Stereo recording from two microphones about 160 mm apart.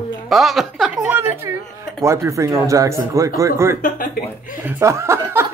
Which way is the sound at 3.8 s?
60° left (ahead or behind).